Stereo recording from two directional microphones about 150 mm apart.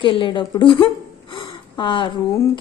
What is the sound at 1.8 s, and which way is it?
Speech, 35° left (ahead or behind).